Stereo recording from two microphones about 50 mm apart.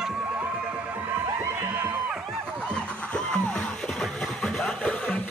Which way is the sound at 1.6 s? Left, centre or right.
Right.